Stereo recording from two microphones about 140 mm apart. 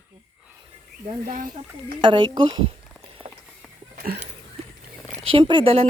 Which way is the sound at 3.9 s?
90° right.